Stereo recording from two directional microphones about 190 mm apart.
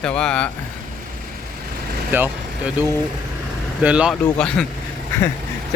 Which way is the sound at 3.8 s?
5° right (ahead or behind).